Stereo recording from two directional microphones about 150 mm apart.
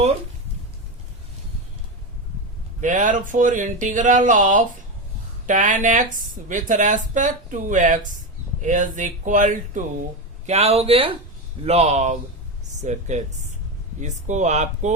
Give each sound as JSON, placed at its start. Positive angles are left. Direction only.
{"t": 2.8, "sound": "speech", "side_deg": -60}
{"t": 10.4, "sound": "speech", "side_deg": -45}